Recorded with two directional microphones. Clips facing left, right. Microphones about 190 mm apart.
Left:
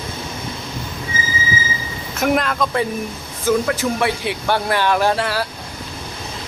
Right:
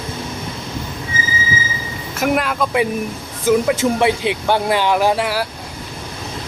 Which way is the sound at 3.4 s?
20° right (ahead or behind).